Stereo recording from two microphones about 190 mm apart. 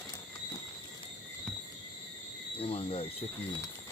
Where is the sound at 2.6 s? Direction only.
30° left (ahead or behind).